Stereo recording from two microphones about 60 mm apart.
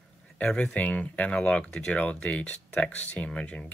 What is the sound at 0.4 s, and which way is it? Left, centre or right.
Speech, centre.